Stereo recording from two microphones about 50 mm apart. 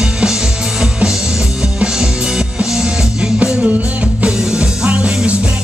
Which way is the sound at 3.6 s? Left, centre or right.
Right.